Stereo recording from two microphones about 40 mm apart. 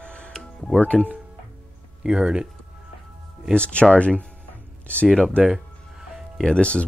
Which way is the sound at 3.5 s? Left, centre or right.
Left.